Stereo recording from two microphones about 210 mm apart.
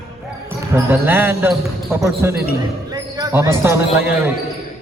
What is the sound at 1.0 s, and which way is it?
Speech, 10° right (ahead or behind).